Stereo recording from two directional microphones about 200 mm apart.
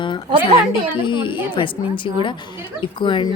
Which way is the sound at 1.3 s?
25° left (ahead or behind).